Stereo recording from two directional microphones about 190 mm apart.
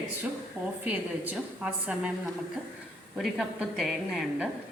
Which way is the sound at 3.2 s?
Centre (ahead or behind).